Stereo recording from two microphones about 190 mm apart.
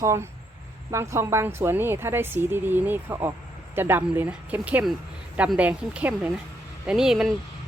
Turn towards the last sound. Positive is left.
turn(degrees=0)  # may be behind; listen again after turning